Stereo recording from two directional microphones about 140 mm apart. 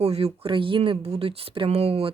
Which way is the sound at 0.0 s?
45° right (ahead or behind).